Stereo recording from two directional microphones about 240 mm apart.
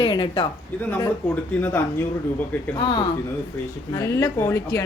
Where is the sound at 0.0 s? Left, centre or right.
Left.